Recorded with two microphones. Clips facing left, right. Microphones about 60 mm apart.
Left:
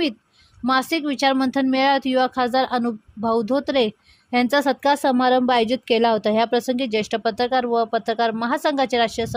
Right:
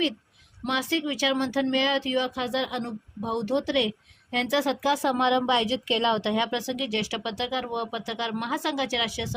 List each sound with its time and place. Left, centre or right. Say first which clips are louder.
0.7 s speech: left 7 dB; left